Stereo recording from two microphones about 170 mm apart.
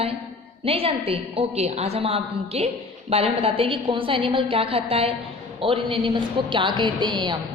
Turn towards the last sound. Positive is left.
turn(degrees=-25)  # may be behind; listen again after turning